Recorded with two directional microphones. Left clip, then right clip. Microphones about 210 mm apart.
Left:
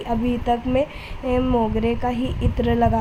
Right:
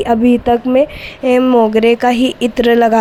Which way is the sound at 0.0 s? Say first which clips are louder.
Right 12 dB; 30° right (ahead or behind).